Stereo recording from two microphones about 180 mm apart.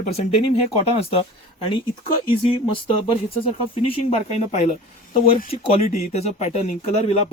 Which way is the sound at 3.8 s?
35° left (ahead or behind).